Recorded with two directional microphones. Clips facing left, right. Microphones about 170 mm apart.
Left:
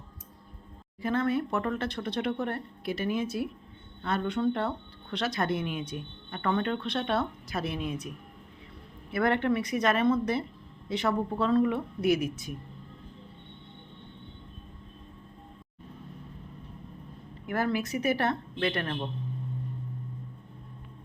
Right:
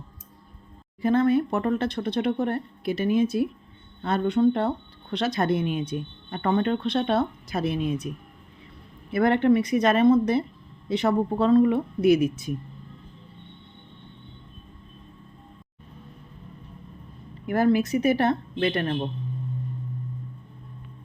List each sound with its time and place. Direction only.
1.0 s speech: 25° right (ahead or behind)
9.1 s speech: 20° right (ahead or behind)
17.4 s speech: 25° right (ahead or behind)